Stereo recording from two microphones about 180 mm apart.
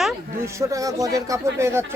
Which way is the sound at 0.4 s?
15° right (ahead or behind).